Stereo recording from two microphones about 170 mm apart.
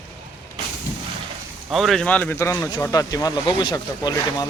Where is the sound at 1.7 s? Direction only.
Centre (ahead or behind).